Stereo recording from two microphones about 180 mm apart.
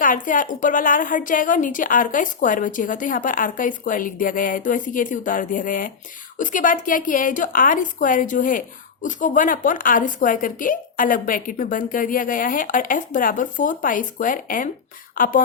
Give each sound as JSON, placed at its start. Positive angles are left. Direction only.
{"t": 0.0, "sound": "a woman's voice", "side_deg": 45}